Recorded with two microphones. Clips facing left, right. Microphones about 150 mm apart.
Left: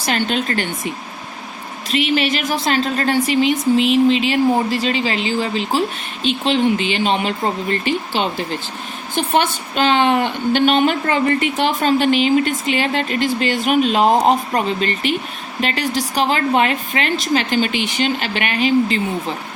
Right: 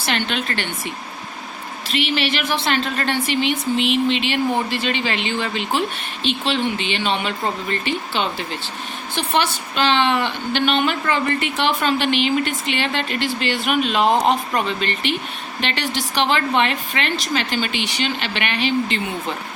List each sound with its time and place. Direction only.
0.0 s a woman's voice: 40° left (ahead or behind)
1.9 s a woman's voice: 45° left (ahead or behind)